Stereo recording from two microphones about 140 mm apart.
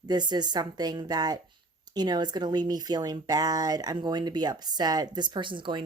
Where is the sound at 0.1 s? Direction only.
30° right (ahead or behind).